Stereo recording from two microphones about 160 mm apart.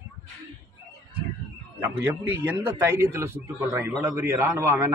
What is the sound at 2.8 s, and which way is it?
A man's voice, 15° right (ahead or behind).